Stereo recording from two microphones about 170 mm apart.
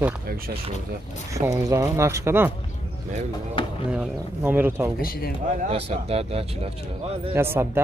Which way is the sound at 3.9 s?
10° right (ahead or behind).